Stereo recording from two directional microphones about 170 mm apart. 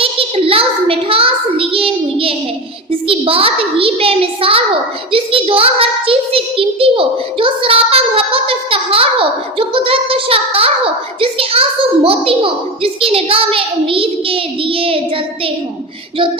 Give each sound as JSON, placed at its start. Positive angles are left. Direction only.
{"t": 0.0, "sound": "child singing", "side_deg": -35}
{"t": 3.1, "sound": "a child's voice", "side_deg": -35}
{"t": 5.1, "sound": "a sound", "side_deg": -30}
{"t": 11.2, "sound": "a child's voice", "side_deg": -35}